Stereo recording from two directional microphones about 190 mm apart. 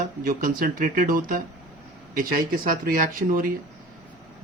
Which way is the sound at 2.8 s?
50° right (ahead or behind).